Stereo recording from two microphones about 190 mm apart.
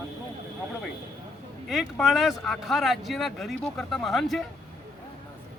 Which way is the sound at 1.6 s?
Centre (ahead or behind).